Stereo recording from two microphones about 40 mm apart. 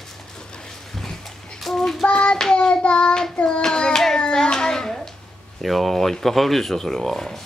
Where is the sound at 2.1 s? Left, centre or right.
Left.